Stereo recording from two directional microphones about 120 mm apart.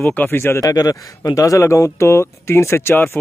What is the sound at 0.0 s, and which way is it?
Speech, 15° left (ahead or behind).